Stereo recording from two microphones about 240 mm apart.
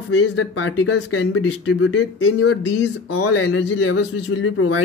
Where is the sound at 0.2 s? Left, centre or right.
Left.